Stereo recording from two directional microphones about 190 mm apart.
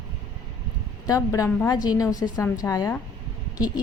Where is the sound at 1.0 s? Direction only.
20° left (ahead or behind).